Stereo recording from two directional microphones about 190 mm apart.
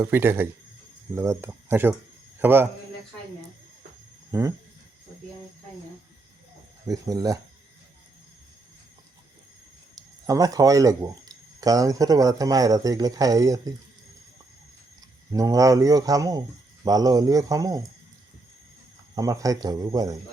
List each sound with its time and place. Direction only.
0.0 s a man's voice: 10° right (ahead or behind)
4.3 s speech: 15° right (ahead or behind)
6.8 s speech: 20° right (ahead or behind)
9.9 s speech: 20° right (ahead or behind)
15.3 s speech: 20° right (ahead or behind)
19.1 s speech: 20° right (ahead or behind)